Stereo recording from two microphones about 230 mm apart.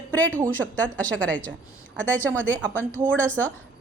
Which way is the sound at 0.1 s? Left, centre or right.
Centre.